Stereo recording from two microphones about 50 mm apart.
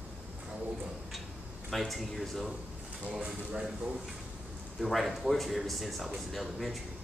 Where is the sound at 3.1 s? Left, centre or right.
Centre.